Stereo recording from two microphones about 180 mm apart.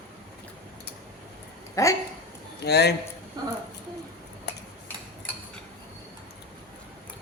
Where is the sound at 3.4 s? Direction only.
25° right (ahead or behind).